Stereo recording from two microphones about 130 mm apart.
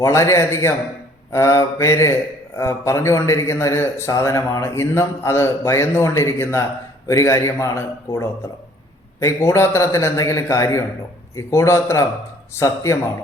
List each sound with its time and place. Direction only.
0.0 s a man's voice: 20° left (ahead or behind)